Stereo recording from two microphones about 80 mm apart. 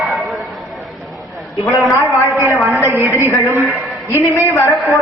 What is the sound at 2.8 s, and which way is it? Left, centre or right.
Speech, right.